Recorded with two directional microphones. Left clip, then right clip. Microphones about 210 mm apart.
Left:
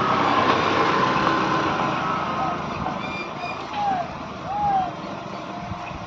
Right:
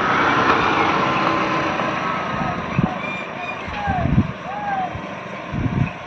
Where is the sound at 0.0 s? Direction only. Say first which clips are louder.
Right 3 dB; 45° right (ahead or behind).